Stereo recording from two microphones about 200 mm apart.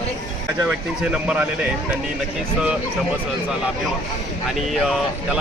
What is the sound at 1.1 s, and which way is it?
Speech, 5° right (ahead or behind).